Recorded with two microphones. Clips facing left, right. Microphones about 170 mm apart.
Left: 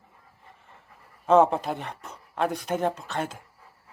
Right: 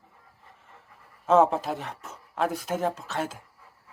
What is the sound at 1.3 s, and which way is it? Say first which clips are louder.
Speech: left 1 dB; centre (ahead or behind).